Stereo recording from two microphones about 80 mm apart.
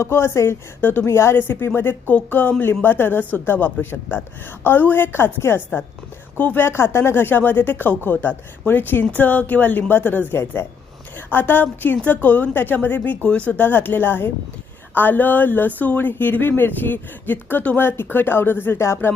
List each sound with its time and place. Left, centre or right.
0.0 s speech: left